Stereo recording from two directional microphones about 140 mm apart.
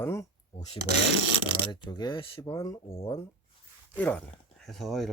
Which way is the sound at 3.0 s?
20° left (ahead or behind).